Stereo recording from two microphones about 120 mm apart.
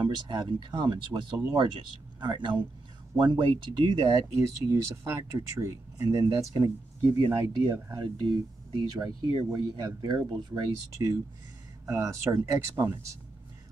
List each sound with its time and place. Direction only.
0.0 s speech: 40° right (ahead or behind)
2.1 s speech: 40° right (ahead or behind); by 8.0 s 20° right (ahead or behind)
8.3 s speech: 35° right (ahead or behind)
10.9 s speech: 25° right (ahead or behind)